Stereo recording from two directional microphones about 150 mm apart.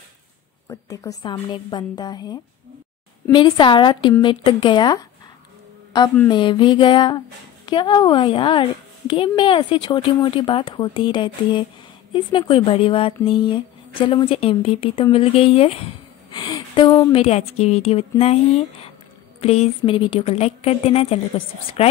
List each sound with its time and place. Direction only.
0.7 s a woman's voice: 20° left (ahead or behind)
6.2 s speech: 30° left (ahead or behind)
17.1 s a woman's voice: 45° left (ahead or behind)